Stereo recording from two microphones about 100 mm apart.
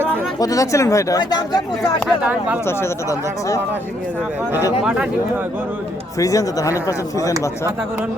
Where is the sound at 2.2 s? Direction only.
15° right (ahead or behind).